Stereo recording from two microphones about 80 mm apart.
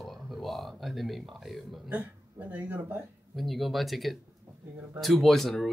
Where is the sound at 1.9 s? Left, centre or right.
Right.